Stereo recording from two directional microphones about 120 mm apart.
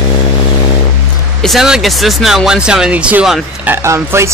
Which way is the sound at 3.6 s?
20° right (ahead or behind).